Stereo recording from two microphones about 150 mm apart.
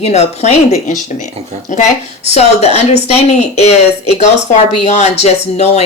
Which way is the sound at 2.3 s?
45° left (ahead or behind).